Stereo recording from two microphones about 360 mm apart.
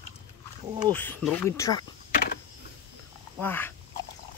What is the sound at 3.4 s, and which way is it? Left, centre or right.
Speech, centre.